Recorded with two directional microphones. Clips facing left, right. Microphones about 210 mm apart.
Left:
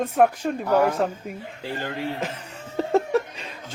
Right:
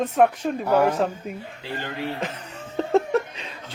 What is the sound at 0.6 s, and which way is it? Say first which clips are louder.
Speech: right 1 dB; 10° right (ahead or behind).